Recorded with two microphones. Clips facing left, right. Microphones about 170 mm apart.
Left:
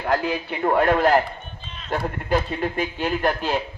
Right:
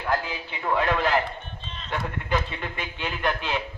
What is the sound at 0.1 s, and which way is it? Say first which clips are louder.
A man's voice: left 5 dB; 60° left (ahead or behind).